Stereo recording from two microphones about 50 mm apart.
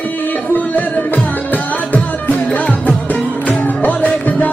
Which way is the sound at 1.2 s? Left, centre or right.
Left.